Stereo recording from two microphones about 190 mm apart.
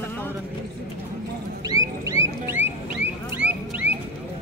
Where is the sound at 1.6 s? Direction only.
20° right (ahead or behind).